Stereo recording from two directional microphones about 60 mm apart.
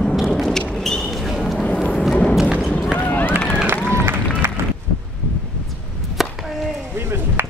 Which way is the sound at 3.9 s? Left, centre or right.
Right.